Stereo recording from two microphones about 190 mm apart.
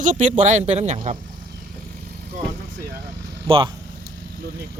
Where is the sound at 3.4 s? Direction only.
30° right (ahead or behind).